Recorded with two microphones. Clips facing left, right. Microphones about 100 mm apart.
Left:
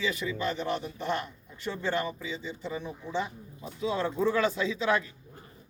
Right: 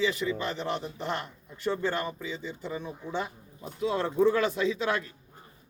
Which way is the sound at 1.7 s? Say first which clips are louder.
Left 1 dB; 45° right (ahead or behind).